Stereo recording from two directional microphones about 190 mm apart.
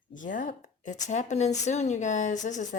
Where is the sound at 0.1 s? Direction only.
45° left (ahead or behind).